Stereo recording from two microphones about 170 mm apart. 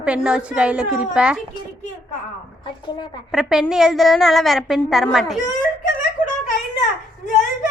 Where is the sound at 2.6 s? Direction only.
25° left (ahead or behind).